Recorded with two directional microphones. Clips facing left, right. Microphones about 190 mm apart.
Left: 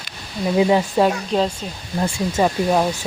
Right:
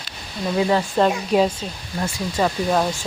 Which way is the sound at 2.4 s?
10° left (ahead or behind).